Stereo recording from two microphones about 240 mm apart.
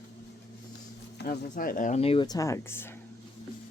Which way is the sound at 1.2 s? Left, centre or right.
Left.